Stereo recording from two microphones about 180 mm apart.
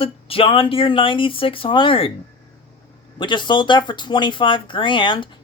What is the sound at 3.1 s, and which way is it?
Speech, 25° left (ahead or behind).